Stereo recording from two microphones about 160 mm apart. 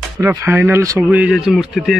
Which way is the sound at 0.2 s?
15° right (ahead or behind).